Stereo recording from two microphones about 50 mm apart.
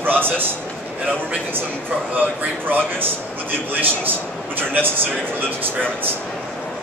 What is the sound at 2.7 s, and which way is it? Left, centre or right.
Speech, right.